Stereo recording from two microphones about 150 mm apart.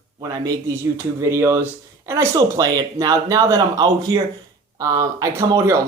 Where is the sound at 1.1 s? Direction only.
20° right (ahead or behind).